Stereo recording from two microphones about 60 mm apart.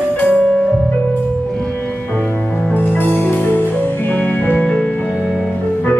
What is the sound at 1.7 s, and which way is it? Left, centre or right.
Music, left.